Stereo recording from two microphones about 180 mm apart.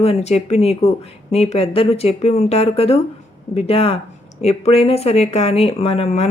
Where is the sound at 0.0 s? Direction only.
35° left (ahead or behind).